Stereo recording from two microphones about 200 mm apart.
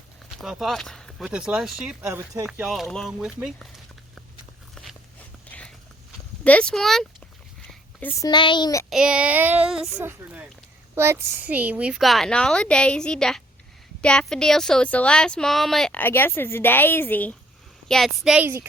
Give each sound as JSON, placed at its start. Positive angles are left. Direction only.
{"t": 0.4, "sound": "speech", "side_deg": 0}
{"t": 5.5, "sound": "a sound", "side_deg": 5}
{"t": 6.4, "sound": "speech", "side_deg": 5}
{"t": 7.7, "sound": "a sound", "side_deg": 5}
{"t": 8.2, "sound": "speech", "side_deg": 20}
{"t": 8.9, "sound": "speech", "side_deg": -5}